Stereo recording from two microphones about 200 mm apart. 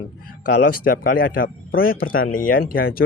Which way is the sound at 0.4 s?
45° left (ahead or behind).